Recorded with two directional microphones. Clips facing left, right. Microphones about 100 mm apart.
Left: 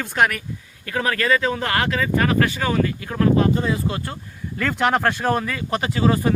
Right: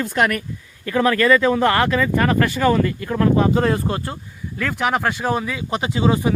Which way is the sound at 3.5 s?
65° right (ahead or behind).